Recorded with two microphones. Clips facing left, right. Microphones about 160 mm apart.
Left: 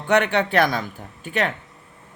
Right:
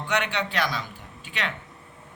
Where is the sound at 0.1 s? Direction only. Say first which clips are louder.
Left 9 dB; 50° left (ahead or behind).